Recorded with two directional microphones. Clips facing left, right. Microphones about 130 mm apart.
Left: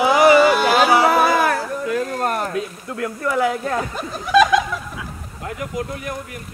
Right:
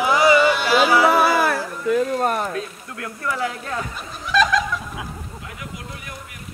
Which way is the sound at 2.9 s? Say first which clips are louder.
Left 5 dB; 25° left (ahead or behind).